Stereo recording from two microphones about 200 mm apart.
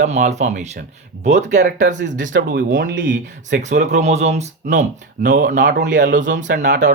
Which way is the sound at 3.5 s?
35° right (ahead or behind).